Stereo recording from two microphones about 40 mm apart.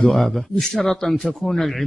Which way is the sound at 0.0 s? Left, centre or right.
Centre.